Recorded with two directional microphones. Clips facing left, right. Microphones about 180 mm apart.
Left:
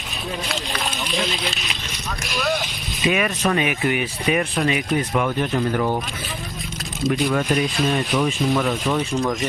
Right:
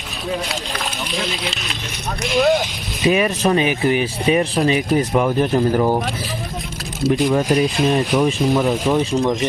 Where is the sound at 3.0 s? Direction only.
35° right (ahead or behind).